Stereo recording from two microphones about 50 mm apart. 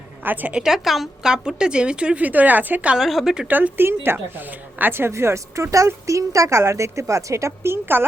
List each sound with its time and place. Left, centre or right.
0.3 s speech: right
0.5 s a woman's voice: centre
2.2 s speech: right
3.0 s a woman's voice: centre
3.4 s speech: right
3.8 s a woman's voice: right
5.1 s speech: right
5.7 s a woman's voice: right
7.6 s a woman's voice: right